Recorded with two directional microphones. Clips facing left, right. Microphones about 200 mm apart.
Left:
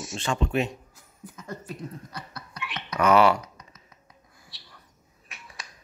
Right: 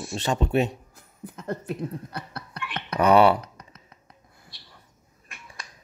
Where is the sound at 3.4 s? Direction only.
60° right (ahead or behind).